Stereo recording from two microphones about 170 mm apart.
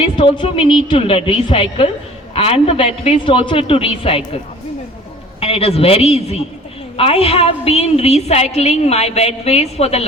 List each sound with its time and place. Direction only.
0.0 s a woman's voice: 30° left (ahead or behind)
5.4 s a woman's voice: 35° left (ahead or behind)